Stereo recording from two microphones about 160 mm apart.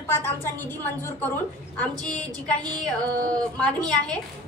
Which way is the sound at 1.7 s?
5° left (ahead or behind).